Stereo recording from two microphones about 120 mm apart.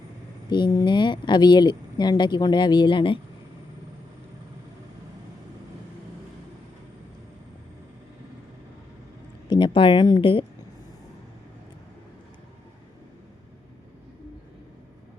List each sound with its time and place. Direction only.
0.5 s speech: 35° left (ahead or behind)
9.5 s speech: 40° left (ahead or behind)